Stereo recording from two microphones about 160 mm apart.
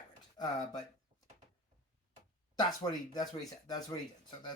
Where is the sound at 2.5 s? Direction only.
25° left (ahead or behind).